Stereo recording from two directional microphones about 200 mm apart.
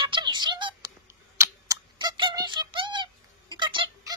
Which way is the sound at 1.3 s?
15° right (ahead or behind).